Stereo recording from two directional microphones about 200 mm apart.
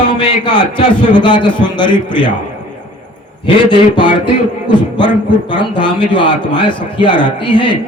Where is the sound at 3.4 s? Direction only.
25° left (ahead or behind).